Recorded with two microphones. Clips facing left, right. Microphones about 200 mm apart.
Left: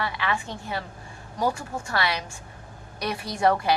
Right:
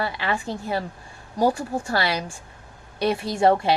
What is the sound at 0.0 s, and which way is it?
Speech, 35° right (ahead or behind).